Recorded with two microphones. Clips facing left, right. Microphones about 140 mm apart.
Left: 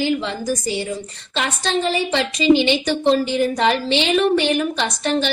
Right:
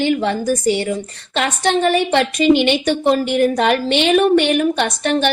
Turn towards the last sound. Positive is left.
turn(degrees=-60)  # may be behind; listen again after turning